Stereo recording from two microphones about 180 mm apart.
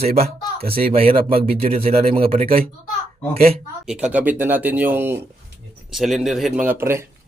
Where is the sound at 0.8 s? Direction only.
30° right (ahead or behind).